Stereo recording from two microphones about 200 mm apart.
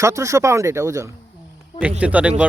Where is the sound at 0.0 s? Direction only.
15° right (ahead or behind).